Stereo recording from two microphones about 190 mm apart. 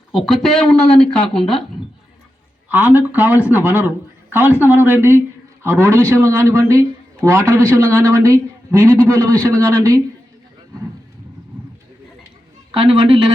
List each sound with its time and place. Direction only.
0.1 s speech: centre (ahead or behind)
2.6 s a man's voice: 10° right (ahead or behind)
12.7 s a woman's voice: 30° right (ahead or behind)